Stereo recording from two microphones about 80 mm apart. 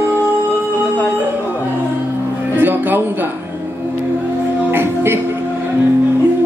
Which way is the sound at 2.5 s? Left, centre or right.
Right.